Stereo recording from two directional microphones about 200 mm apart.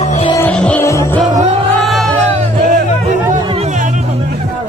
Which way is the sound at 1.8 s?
Centre (ahead or behind).